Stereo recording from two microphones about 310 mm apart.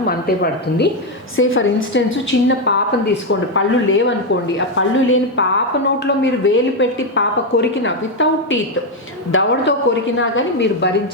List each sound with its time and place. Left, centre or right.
0.0 s a woman's voice: left